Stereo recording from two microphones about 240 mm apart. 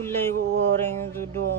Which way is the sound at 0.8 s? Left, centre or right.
Centre.